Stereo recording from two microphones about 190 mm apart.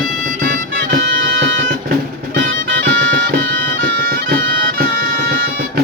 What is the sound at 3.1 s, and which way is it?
Music, 50° right (ahead or behind).